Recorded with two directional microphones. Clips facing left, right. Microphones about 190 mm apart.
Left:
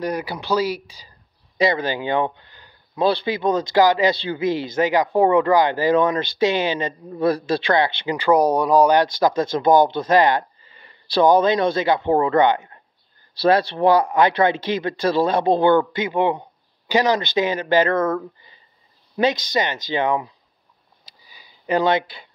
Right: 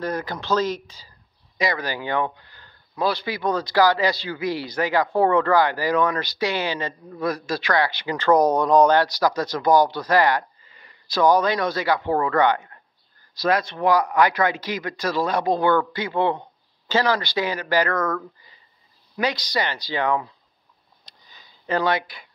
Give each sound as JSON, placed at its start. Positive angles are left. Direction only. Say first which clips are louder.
{"t": 0.0, "sound": "speech", "louder": "left 2 dB", "side_deg": 10}
{"t": 1.6, "sound": "speech", "louder": "left 5 dB", "side_deg": 25}
{"t": 7.2, "sound": "speech", "louder": "left 6 dB", "side_deg": 30}
{"t": 8.2, "sound": "speech", "louder": "left 1 dB", "side_deg": 10}
{"t": 9.0, "sound": "speech", "louder": "left 3 dB", "side_deg": 25}
{"t": 21.0, "sound": "a sound", "louder": "left 1 dB", "side_deg": 10}